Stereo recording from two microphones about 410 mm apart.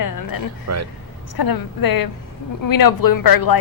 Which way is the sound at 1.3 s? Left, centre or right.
Left.